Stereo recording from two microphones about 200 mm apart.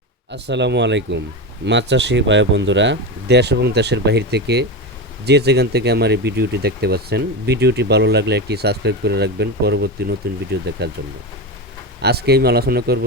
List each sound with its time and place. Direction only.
0.3 s speech: 60° right (ahead or behind)
12.0 s speech: 55° right (ahead or behind)